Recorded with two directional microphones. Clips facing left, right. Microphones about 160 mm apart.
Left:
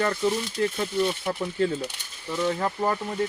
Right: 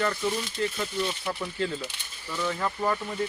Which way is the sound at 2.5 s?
30° left (ahead or behind).